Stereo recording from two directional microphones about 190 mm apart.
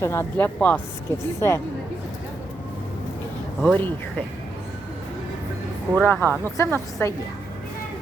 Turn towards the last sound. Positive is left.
turn(degrees=15)  # may be behind; listen again after turning